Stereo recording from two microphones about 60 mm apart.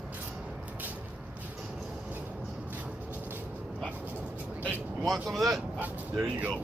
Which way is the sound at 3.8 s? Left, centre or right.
Right.